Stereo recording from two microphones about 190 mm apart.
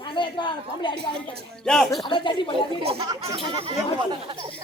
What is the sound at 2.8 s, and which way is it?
Speech, 30° right (ahead or behind).